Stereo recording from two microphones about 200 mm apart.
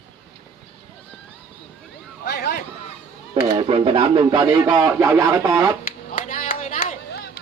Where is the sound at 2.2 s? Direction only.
50° left (ahead or behind).